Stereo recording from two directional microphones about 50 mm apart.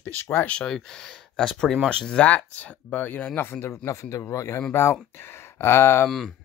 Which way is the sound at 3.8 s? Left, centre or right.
Left.